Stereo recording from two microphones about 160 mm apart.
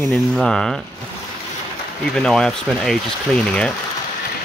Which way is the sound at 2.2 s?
5° left (ahead or behind).